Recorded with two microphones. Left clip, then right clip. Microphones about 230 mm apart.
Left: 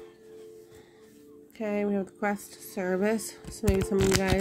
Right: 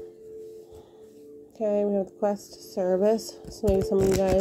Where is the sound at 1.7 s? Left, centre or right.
Left.